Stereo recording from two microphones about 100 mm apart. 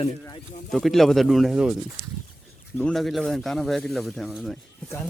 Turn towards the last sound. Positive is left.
turn(degrees=0)  # may be behind; listen again after turning